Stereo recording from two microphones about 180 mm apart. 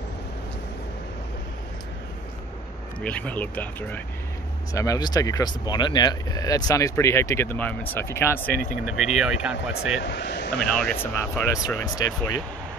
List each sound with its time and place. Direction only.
3.0 s speech: 5° left (ahead or behind)
4.7 s speech: 20° left (ahead or behind)
9.1 s speech: 5° right (ahead or behind)
10.0 s speech: 75° left (ahead or behind)
10.7 s speech: 5° left (ahead or behind)